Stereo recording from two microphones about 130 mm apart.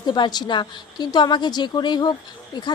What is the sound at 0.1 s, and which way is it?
Speech, 35° left (ahead or behind).